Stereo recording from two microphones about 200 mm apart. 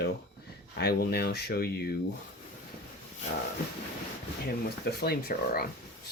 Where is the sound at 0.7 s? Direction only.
50° left (ahead or behind).